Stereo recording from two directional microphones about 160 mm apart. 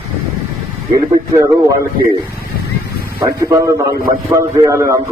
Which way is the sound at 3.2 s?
20° right (ahead or behind).